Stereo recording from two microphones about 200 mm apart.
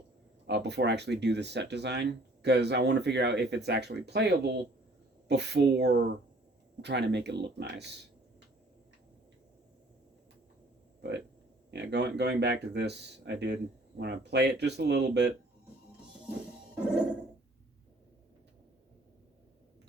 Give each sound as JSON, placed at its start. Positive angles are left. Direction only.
{"t": 0.4, "sound": "speech", "side_deg": -60}
{"t": 11.7, "sound": "speech", "side_deg": -55}